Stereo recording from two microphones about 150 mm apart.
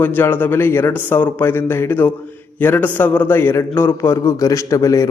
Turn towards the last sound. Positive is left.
turn(degrees=20)  # may be behind; listen again after turning